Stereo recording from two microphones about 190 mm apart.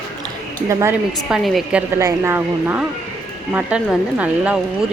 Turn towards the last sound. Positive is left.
turn(degrees=-5)  # may be behind; listen again after turning